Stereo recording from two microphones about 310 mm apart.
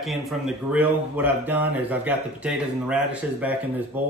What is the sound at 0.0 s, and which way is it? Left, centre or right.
Speech, centre.